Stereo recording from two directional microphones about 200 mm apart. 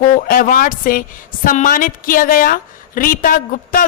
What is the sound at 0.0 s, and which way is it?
A woman's voice, 45° left (ahead or behind).